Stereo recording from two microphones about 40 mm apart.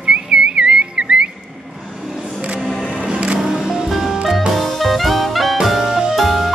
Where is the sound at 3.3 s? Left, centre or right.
Centre.